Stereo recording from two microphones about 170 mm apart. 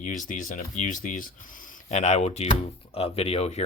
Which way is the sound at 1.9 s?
40° left (ahead or behind).